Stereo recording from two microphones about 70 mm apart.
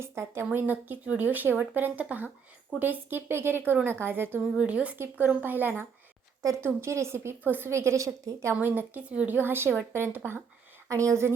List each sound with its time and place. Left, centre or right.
0.0 s speech: right
0.5 s speech: right
4.5 s speech: centre
6.6 s speech: right
7.4 s speech: right
7.7 s a woman's voice: right
8.6 s speech: right
10.8 s speech: right